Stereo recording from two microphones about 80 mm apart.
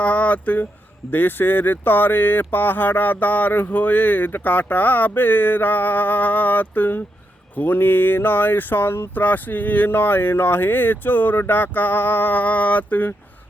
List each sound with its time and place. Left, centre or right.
0.0 s speech: centre